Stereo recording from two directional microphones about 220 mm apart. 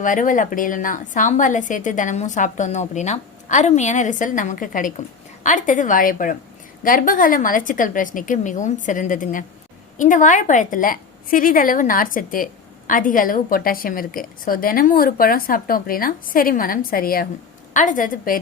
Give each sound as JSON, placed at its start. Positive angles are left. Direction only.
{"t": 0.0, "sound": "a woman's voice", "side_deg": 35}